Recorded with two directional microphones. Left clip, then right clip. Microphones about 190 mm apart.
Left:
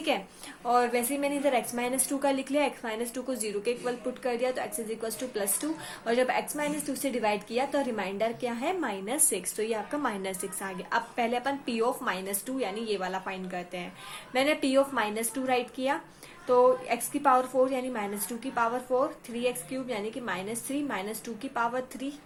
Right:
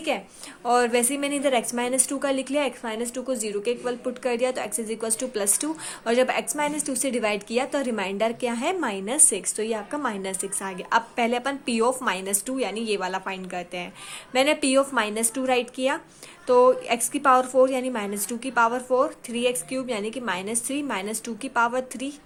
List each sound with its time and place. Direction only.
0.6 s a woman's voice: 35° right (ahead or behind)